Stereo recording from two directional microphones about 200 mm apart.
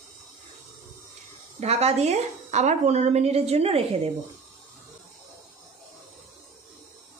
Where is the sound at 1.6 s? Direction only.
30° right (ahead or behind).